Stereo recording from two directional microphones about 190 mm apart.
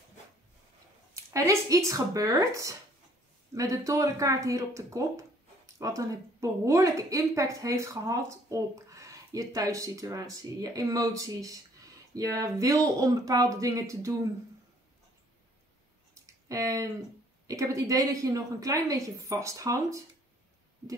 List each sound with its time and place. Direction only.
1.1 s a woman's voice: 15° right (ahead or behind)
16.2 s a sound: 15° right (ahead or behind)
17.5 s a woman's voice: 15° right (ahead or behind)